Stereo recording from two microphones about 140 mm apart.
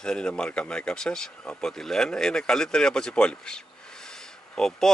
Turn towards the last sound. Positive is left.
turn(degrees=5)  # may be behind; listen again after turning